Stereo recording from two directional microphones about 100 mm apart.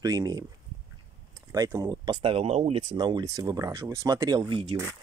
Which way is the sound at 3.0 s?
50° right (ahead or behind).